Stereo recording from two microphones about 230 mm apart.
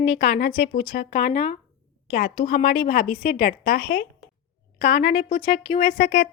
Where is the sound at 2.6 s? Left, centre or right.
Left.